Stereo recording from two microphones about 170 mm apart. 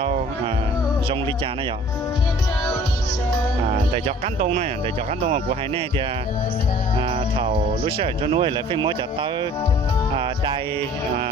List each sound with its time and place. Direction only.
3.9 s speech: 40° right (ahead or behind)
7.1 s speech: 30° right (ahead or behind)